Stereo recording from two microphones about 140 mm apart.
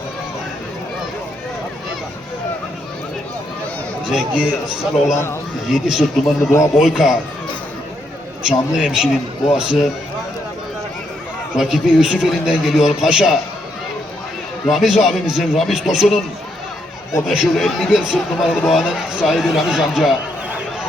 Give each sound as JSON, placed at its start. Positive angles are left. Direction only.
{"t": 4.0, "sound": "speech", "side_deg": -5}
{"t": 5.1, "sound": "a man's voice", "side_deg": 20}
{"t": 5.6, "sound": "a man's voice", "side_deg": 0}
{"t": 6.4, "sound": "a man's voice", "side_deg": 20}
{"t": 6.7, "sound": "a man's voice", "side_deg": -5}
{"t": 8.4, "sound": "a man's voice", "side_deg": -5}
{"t": 11.5, "sound": "a man's voice", "side_deg": -5}
{"t": 14.7, "sound": "a man's voice", "side_deg": 0}
{"t": 17.2, "sound": "a man's voice", "side_deg": 0}